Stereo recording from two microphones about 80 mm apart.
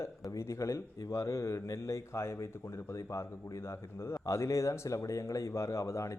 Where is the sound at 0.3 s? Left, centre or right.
Left.